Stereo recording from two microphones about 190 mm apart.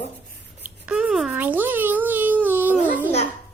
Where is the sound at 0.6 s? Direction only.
5° right (ahead or behind).